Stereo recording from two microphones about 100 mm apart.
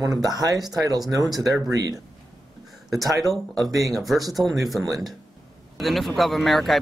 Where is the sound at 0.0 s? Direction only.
35° right (ahead or behind).